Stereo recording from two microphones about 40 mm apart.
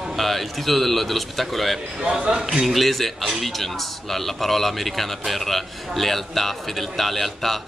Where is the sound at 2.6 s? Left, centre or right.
Centre.